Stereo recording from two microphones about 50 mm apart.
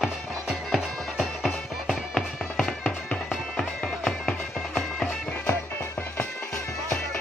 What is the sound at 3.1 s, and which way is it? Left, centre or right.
Music, centre.